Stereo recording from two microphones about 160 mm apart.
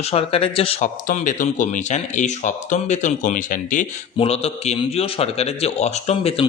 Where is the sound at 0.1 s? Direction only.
35° left (ahead or behind).